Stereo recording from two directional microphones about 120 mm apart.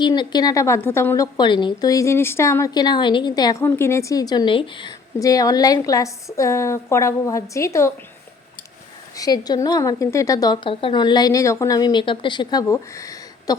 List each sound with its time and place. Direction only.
0.0 s a woman's voice: 40° left (ahead or behind)
1.5 s a woman's voice: 40° left (ahead or behind)
3.6 s a woman's voice: 20° left (ahead or behind); by 4.9 s 40° left (ahead or behind)
5.2 s a woman's voice: 30° left (ahead or behind)
9.1 s a woman's voice: 30° left (ahead or behind)